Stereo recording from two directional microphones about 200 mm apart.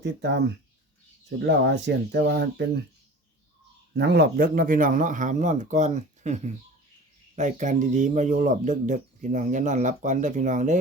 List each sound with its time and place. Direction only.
0.0 s speech: 60° right (ahead or behind)
3.9 s speech: 55° right (ahead or behind); by 10.8 s 40° right (ahead or behind)